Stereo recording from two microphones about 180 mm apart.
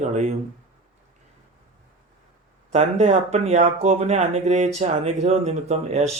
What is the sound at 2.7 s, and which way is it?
Speech, 35° right (ahead or behind).